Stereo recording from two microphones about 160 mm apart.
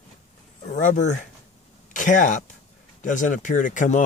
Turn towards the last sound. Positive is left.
turn(degrees=55)  # may be behind; listen again after turning